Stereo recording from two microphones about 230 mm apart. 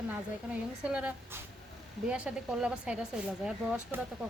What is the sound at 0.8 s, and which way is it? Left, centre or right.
A woman's voice, centre.